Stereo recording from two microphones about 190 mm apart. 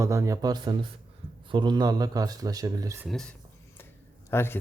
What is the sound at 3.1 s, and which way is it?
Speech, centre (ahead or behind).